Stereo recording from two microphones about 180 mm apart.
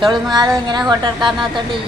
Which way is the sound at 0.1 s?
25° right (ahead or behind).